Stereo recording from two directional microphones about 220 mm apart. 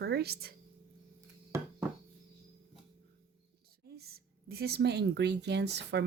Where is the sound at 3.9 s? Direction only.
45° right (ahead or behind).